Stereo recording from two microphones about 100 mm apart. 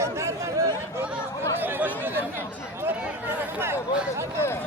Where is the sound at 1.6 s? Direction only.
15° right (ahead or behind).